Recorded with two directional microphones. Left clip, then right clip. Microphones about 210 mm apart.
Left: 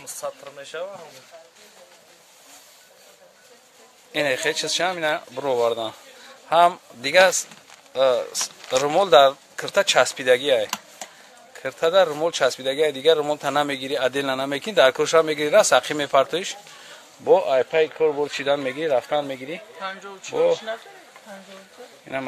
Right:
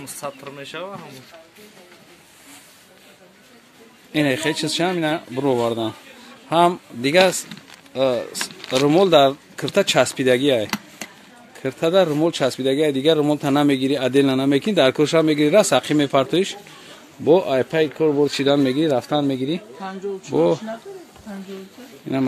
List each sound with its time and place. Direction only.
0.2 s speech: 30° left (ahead or behind)
4.1 s speech: centre (ahead or behind)
7.9 s speech: 15° left (ahead or behind); by 19.6 s 5° right (ahead or behind)
19.8 s speech: 40° left (ahead or behind)
22.1 s speech: 10° right (ahead or behind)